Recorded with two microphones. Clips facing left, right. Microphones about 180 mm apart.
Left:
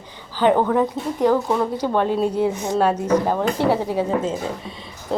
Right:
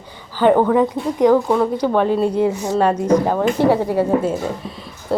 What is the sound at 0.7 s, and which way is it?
A woman's voice, centre (ahead or behind).